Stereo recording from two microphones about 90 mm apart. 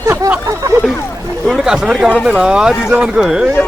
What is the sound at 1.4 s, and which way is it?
Speech, 5° right (ahead or behind).